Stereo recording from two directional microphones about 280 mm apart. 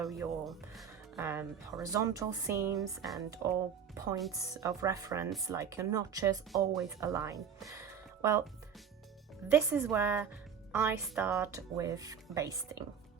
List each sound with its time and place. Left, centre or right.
0.4 s a woman's voice: centre
9.5 s speech: centre